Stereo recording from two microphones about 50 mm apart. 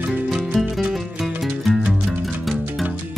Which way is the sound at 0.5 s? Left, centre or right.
Centre.